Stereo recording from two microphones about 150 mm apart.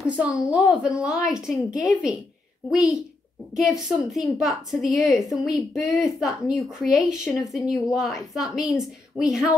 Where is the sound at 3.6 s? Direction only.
Centre (ahead or behind).